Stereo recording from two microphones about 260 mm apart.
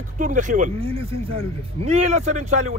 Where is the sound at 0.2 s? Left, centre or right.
Right.